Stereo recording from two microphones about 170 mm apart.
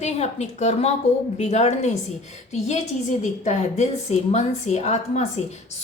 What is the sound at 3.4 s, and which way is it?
A woman's voice, 45° left (ahead or behind).